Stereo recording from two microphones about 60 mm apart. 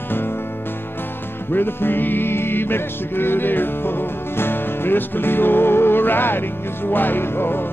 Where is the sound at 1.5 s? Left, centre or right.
Left.